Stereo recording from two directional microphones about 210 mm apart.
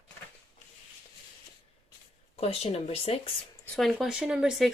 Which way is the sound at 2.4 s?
30° left (ahead or behind).